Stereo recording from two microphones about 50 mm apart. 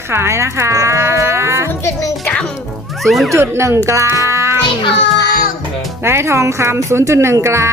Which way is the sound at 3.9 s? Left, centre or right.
Right.